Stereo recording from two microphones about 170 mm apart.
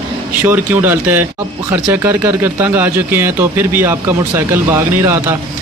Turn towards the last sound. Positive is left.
turn(degrees=-15)  # may be behind; listen again after turning